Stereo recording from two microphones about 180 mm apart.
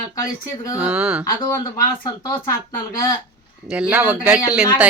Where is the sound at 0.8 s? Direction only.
5° right (ahead or behind).